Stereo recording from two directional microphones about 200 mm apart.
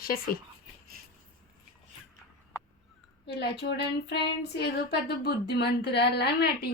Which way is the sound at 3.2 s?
55° left (ahead or behind).